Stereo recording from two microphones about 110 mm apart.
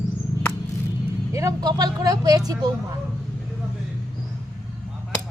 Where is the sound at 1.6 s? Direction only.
35° right (ahead or behind).